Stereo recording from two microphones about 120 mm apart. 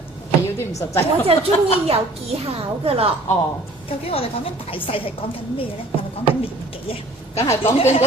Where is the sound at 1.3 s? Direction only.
50° right (ahead or behind).